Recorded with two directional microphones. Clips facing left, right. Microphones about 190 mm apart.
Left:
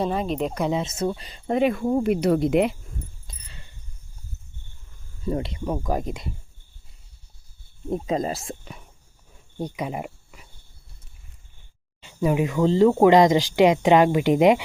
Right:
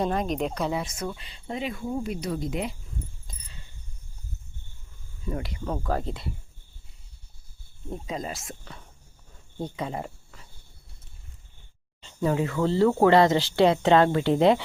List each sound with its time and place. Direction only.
0.0 s speech: 5° left (ahead or behind)
0.6 s speech: 20° left (ahead or behind); by 1.4 s 40° left (ahead or behind)
1.5 s speech: 60° left (ahead or behind)
3.2 s cricket: 70° left (ahead or behind)
5.2 s speech: 30° left (ahead or behind)
5.6 s speech: 15° left (ahead or behind)
7.9 s speech: 40° left (ahead or behind)
9.6 s speech: 15° left (ahead or behind)
12.0 s speech: 15° left (ahead or behind)